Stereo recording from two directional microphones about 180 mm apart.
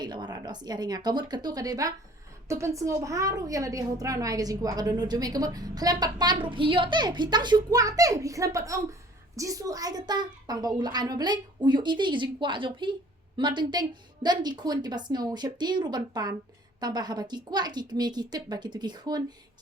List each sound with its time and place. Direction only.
0.0 s a woman's voice: 25° right (ahead or behind)